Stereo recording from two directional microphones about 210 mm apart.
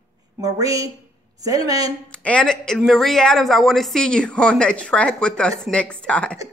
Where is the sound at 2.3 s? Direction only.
5° left (ahead or behind).